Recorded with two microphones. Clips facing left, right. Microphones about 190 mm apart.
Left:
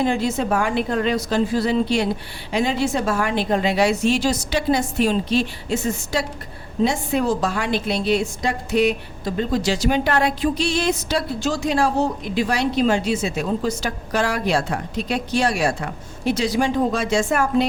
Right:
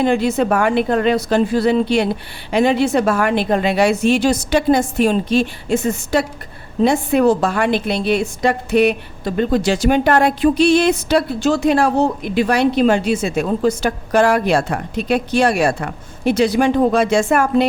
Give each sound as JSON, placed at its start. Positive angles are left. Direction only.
{"t": 0.0, "sound": "a woman's voice", "side_deg": -60}